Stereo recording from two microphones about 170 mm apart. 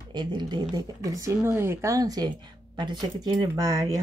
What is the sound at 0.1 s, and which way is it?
Speech, 25° right (ahead or behind).